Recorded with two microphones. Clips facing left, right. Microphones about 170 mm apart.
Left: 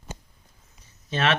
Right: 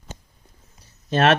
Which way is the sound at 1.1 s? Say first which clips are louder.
Right 7 dB; 45° right (ahead or behind).